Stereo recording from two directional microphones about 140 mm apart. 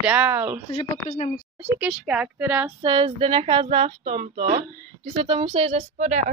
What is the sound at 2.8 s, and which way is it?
Speech, 35° right (ahead or behind).